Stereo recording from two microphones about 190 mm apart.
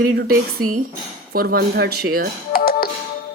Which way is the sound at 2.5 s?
50° left (ahead or behind).